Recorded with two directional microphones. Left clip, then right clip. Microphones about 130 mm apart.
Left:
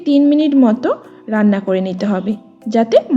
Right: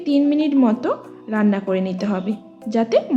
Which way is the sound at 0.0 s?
35° left (ahead or behind).